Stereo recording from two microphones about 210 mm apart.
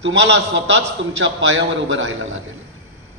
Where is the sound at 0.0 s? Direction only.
60° right (ahead or behind).